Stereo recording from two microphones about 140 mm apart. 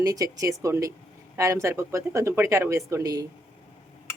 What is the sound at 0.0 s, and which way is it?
Speech, 25° right (ahead or behind).